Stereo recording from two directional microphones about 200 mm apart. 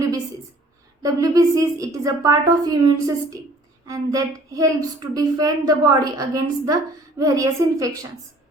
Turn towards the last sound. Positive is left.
turn(degrees=-15)  # may be behind; listen again after turning